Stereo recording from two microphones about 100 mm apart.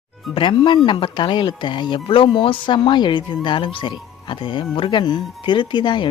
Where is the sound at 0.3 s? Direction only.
55° left (ahead or behind).